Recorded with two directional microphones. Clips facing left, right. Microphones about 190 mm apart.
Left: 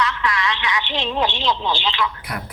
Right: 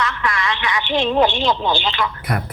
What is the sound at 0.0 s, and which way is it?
A woman's voice, 50° right (ahead or behind).